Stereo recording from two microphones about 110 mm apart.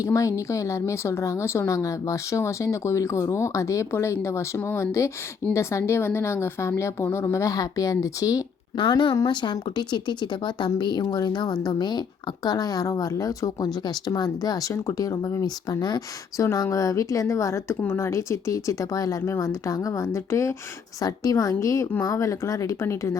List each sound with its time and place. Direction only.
0.0 s a woman's voice: 30° left (ahead or behind)
8.8 s a woman's voice: 45° left (ahead or behind); by 23.1 s 25° left (ahead or behind)